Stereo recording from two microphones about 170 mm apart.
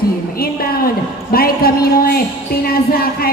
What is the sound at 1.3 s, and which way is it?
Music, 60° left (ahead or behind).